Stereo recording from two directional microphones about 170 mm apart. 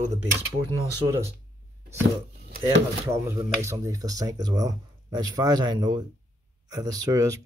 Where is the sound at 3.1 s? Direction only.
15° right (ahead or behind).